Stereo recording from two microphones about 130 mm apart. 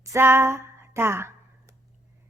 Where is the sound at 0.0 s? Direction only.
20° right (ahead or behind).